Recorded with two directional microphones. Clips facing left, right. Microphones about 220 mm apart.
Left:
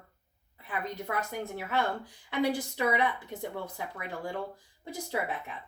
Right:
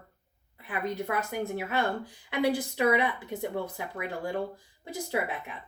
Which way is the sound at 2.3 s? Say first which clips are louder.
Right 2 dB; 10° right (ahead or behind).